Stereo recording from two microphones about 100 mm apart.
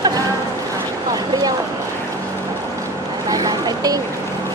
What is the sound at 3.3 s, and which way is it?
Boat, 40° right (ahead or behind).